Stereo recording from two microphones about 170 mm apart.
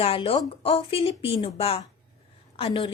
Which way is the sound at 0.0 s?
35° left (ahead or behind).